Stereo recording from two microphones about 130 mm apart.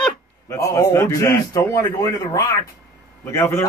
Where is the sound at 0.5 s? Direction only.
25° left (ahead or behind).